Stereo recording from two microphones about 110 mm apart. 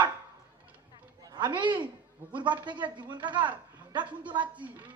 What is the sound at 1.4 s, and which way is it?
Speech, 45° right (ahead or behind).